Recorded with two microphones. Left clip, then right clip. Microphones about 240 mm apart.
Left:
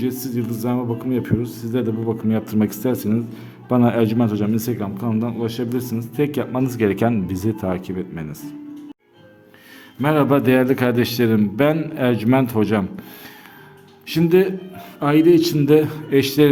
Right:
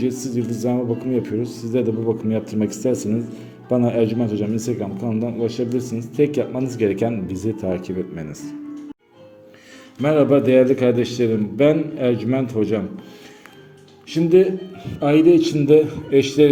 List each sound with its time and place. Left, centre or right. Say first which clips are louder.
0.0 s a man's voice: right 1 dB; centre
10.0 s a man's voice: right 1 dB; left
14.1 s a man's voice: right 1 dB; left